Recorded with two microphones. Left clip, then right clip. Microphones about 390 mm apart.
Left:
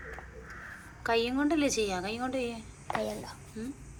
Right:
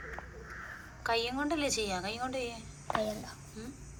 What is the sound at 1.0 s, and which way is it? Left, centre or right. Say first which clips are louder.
A woman's voice: left 3 dB; centre.